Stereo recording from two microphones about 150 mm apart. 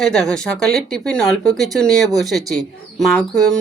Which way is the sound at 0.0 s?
5° left (ahead or behind).